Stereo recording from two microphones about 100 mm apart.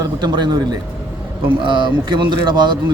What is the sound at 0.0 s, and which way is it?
Speech, 45° right (ahead or behind).